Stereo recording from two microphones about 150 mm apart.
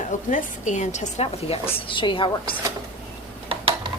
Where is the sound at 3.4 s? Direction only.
40° right (ahead or behind).